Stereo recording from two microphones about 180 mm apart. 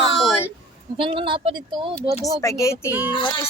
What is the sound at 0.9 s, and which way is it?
Speech, 30° right (ahead or behind).